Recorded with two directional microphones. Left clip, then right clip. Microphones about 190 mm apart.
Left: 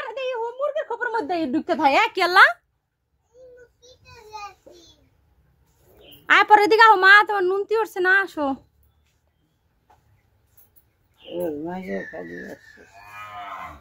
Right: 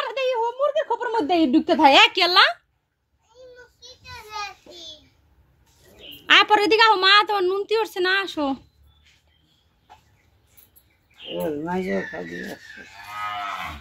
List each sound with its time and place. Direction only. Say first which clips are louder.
0.0 s a sound: right 4 dB; 15° right (ahead or behind)
1.3 s speech: right 5 dB; 15° right (ahead or behind)
2.0 s a woman's voice: left 1 dB; 10° left (ahead or behind)
4.0 s a sound: right 4 dB; 25° left (ahead or behind)
6.2 s a woman's voice: left 1 dB; 10° left (ahead or behind)
11.3 s speech: right 2 dB; 15° right (ahead or behind)